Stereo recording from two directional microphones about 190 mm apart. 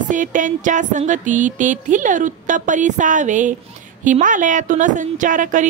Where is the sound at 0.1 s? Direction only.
45° right (ahead or behind).